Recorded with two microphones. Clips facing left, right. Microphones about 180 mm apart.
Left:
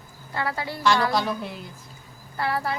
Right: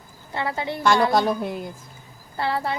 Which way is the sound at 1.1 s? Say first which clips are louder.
Right 5 dB; 50° right (ahead or behind).